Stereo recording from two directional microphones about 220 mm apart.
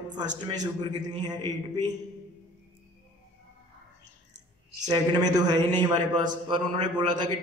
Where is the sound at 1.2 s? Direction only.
20° right (ahead or behind).